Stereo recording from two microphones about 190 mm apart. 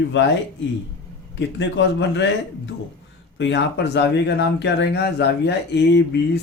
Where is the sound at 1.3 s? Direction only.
75° left (ahead or behind).